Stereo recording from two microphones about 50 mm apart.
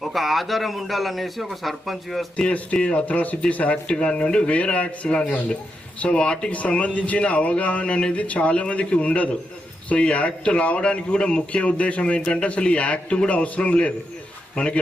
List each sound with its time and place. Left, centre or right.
0.0 s a man's voice: centre
2.3 s speech: left